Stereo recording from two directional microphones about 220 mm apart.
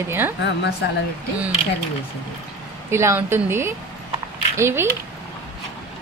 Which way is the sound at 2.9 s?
10° right (ahead or behind).